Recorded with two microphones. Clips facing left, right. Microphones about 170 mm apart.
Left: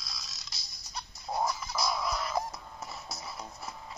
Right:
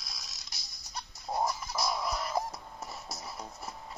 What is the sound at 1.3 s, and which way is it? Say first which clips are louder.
Music: even; 10° right (ahead or behind).